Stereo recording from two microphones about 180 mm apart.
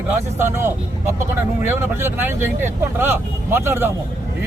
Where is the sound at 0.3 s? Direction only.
15° right (ahead or behind).